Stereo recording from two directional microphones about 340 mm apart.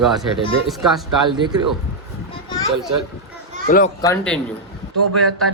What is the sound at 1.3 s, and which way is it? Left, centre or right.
Speech, centre.